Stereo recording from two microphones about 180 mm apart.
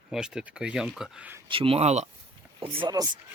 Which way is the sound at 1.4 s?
30° right (ahead or behind).